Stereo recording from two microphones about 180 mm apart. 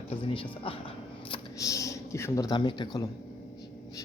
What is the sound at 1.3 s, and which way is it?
Speech, 20° left (ahead or behind).